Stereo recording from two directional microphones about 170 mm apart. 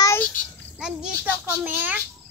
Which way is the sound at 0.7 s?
5° right (ahead or behind).